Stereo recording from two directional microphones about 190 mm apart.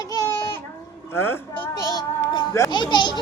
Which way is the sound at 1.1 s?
10° left (ahead or behind).